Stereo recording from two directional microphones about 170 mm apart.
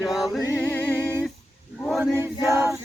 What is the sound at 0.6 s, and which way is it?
Music, 10° left (ahead or behind).